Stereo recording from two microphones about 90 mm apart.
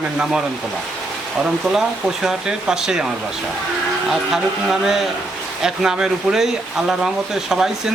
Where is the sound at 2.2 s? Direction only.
5° right (ahead or behind).